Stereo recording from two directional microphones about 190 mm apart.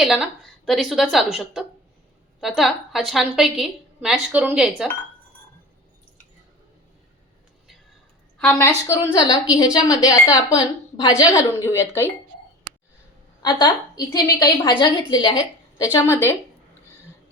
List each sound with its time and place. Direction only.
0.0 s a woman's voice: centre (ahead or behind)
8.4 s a woman's voice: 10° left (ahead or behind)
13.4 s a woman's voice: 20° left (ahead or behind)